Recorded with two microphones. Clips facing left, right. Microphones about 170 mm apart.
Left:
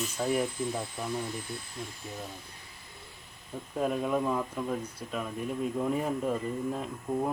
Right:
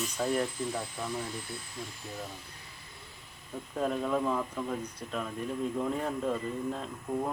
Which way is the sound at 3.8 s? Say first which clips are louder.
Left 1 dB; 5° left (ahead or behind).